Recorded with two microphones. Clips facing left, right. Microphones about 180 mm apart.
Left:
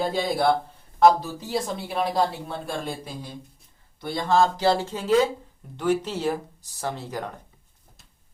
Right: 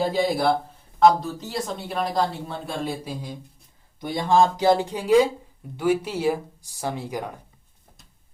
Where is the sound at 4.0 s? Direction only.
15° right (ahead or behind).